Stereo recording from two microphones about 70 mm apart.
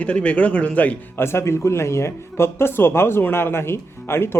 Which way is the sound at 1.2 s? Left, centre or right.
Left.